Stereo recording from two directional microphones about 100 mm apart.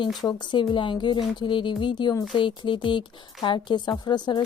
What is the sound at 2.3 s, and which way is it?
Speech, 55° left (ahead or behind).